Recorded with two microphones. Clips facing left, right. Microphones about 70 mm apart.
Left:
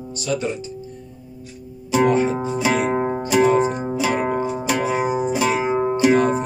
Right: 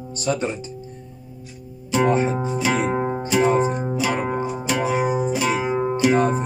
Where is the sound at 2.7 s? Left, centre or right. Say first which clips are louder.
Left 2 dB; centre.